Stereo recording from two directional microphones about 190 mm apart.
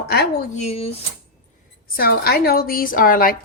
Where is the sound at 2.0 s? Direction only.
55° left (ahead or behind).